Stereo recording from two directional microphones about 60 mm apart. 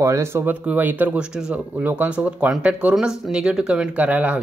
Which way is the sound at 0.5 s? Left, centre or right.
Right.